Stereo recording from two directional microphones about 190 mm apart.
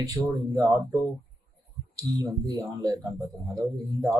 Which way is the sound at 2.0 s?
15° right (ahead or behind).